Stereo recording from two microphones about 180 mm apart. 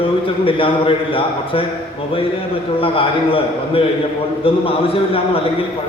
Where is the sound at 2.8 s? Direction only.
30° left (ahead or behind).